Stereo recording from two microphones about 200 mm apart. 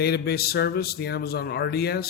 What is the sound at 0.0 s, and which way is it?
A man's voice, 50° left (ahead or behind).